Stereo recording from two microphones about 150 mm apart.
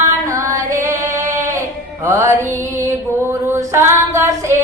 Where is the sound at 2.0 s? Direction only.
20° right (ahead or behind).